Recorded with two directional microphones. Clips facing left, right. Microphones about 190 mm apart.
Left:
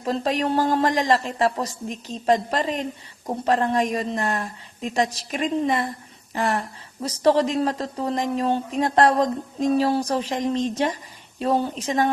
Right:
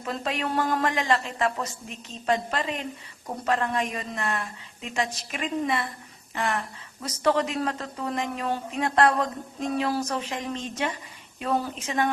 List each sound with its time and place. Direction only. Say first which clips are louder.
0.0 s speech: left 6 dB; 35° left (ahead or behind)